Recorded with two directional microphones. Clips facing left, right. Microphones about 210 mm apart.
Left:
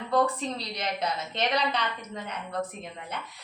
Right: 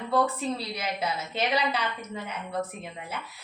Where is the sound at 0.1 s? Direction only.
10° right (ahead or behind).